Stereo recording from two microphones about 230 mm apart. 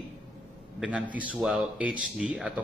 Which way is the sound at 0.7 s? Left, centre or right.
Centre.